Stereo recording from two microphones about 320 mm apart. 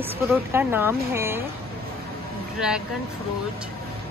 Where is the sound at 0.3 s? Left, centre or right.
Centre.